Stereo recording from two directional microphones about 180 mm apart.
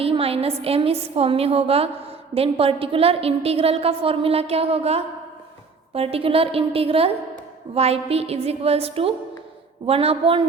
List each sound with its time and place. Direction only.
0.0 s a woman's voice: 30° right (ahead or behind)